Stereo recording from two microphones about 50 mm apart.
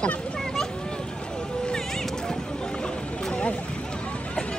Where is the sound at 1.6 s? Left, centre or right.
Centre.